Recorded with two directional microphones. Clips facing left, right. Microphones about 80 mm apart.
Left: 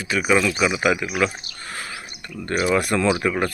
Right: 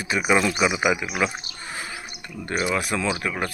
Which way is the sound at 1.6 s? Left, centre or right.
Centre.